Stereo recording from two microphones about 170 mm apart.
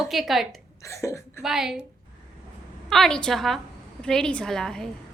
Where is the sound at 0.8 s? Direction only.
15° left (ahead or behind).